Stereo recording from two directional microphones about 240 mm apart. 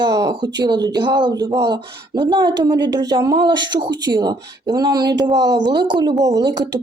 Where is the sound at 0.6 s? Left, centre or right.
Centre.